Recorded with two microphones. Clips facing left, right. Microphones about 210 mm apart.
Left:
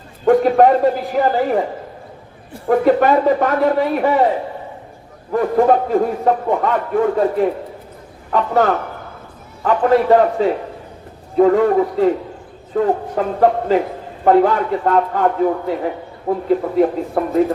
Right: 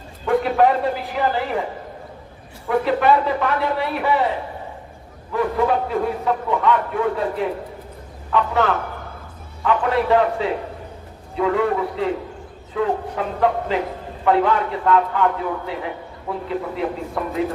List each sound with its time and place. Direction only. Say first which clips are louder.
0.3 s a man's voice: left 6 dB; 45° left (ahead or behind)
2.6 s a man's voice: left 5 dB; 45° left (ahead or behind)
5.3 s a man's voice: left 6 dB; 45° left (ahead or behind)